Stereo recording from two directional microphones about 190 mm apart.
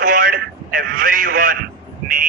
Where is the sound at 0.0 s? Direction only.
45° right (ahead or behind).